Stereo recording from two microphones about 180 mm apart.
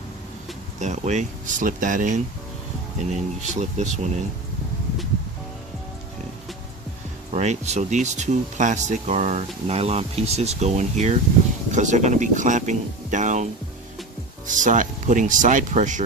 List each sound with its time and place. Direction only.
0.8 s speech: 40° right (ahead or behind)
7.3 s speech: 40° right (ahead or behind)